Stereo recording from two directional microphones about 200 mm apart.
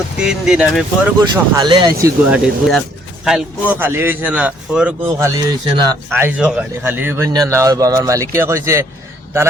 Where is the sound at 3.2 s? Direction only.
5° right (ahead or behind).